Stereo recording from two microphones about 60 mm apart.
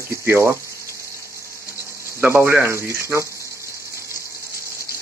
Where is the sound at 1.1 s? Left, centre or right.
Right.